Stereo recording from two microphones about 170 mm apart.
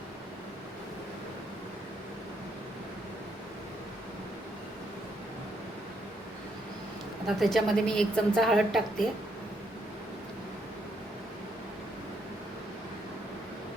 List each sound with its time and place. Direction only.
7.3 s a woman's voice: centre (ahead or behind)